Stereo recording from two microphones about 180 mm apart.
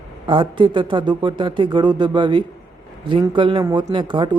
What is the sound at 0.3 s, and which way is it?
Speech, 25° right (ahead or behind).